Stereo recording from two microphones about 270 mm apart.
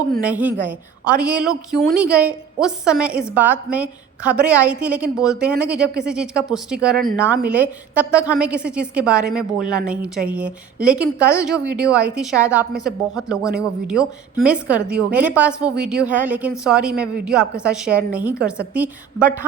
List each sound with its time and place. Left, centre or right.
0.2 s a woman's voice: centre